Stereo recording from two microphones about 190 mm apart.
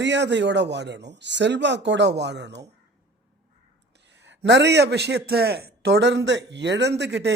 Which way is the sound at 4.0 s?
65° right (ahead or behind).